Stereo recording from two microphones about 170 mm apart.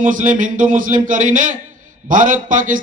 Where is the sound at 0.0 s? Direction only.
50° right (ahead or behind).